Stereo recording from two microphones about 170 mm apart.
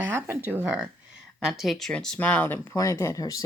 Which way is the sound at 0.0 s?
15° right (ahead or behind).